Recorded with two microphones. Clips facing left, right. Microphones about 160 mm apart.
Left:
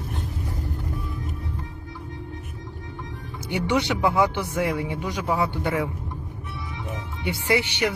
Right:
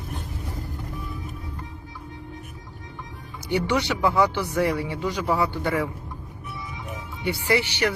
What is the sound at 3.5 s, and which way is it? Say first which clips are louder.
Speech: even; 15° left (ahead or behind).